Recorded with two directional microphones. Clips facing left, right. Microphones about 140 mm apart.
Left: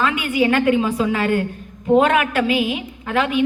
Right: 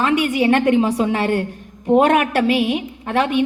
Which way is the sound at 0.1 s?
35° right (ahead or behind).